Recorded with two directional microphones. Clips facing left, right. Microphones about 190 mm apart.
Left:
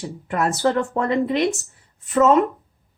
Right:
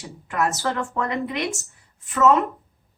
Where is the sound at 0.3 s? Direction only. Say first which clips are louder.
Left 4 dB; 35° left (ahead or behind).